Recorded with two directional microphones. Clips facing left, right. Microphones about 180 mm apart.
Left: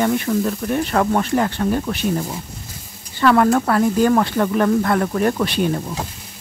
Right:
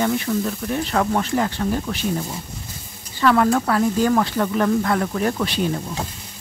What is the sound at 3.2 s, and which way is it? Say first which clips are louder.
Speech: left 2 dB; 45° left (ahead or behind).